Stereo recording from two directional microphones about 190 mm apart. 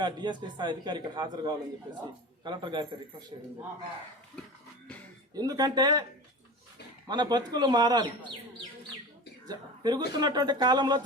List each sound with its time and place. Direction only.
0.0 s a man's voice: 25° right (ahead or behind)
5.3 s a man's voice: 20° right (ahead or behind)
7.1 s a man's voice: 20° right (ahead or behind)
9.5 s a man's voice: 20° right (ahead or behind)